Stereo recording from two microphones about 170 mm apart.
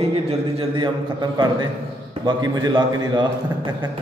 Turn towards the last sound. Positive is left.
turn(degrees=-25)  # may be behind; listen again after turning